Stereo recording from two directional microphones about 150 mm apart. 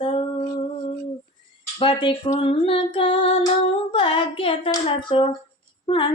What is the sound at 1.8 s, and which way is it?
Female singing, 35° left (ahead or behind).